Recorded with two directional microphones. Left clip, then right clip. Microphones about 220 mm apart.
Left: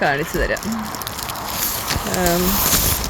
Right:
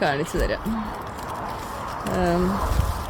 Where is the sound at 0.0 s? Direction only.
25° left (ahead or behind).